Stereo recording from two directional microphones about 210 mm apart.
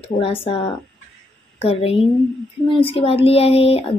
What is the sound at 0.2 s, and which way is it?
Child singing, 25° left (ahead or behind).